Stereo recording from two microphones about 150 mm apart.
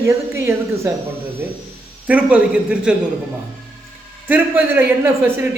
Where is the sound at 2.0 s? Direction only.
10° right (ahead or behind).